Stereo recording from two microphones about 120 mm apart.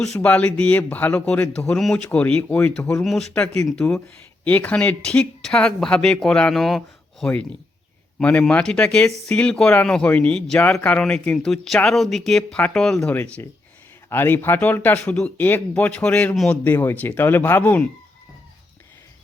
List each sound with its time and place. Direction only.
0.0 s speech: 10° left (ahead or behind)
16.6 s speech: 15° left (ahead or behind)